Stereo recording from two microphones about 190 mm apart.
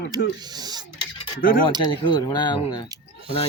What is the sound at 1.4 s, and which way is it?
Speech, 50° left (ahead or behind).